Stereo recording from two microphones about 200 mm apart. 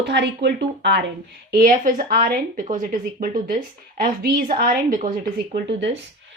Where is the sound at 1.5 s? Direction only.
45° right (ahead or behind).